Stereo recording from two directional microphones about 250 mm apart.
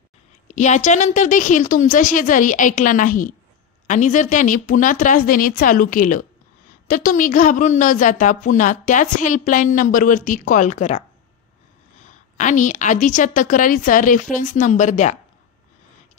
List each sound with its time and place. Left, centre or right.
0.5 s a woman's voice: left
12.1 s a woman's voice: left